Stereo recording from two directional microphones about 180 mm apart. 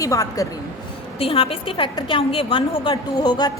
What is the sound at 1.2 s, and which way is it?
A woman's voice, 35° left (ahead or behind).